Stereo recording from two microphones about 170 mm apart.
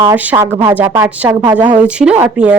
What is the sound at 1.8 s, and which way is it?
Speech, 5° right (ahead or behind).